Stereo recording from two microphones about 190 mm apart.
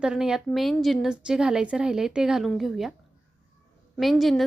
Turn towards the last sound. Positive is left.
turn(degrees=0)  # may be behind; listen again after turning